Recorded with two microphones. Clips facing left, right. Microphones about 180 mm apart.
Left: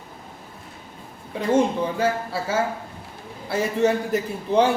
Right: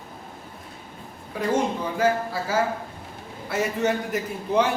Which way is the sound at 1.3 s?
25° left (ahead or behind).